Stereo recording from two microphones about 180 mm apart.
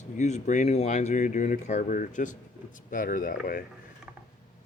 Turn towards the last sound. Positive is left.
turn(degrees=55)  # may be behind; listen again after turning